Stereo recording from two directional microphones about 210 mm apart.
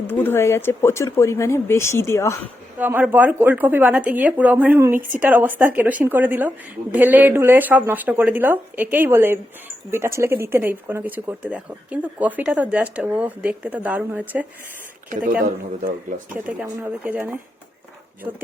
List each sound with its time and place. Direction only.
0.1 s speech: 10° left (ahead or behind)
2.7 s speech: 10° right (ahead or behind)
15.1 s speech: 40° right (ahead or behind)
16.5 s speech: 10° right (ahead or behind)